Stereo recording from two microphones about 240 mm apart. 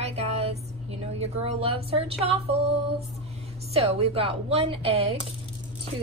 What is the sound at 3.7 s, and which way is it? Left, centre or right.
Speech, right.